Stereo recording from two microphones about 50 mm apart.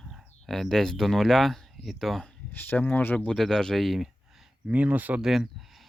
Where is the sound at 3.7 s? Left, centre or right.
Centre.